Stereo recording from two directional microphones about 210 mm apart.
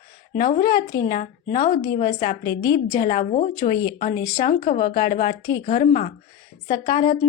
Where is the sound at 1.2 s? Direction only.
40° left (ahead or behind).